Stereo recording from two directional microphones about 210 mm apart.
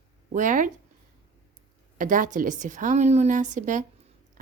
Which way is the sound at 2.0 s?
40° right (ahead or behind).